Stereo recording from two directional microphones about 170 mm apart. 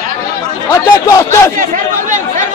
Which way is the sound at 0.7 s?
15° left (ahead or behind).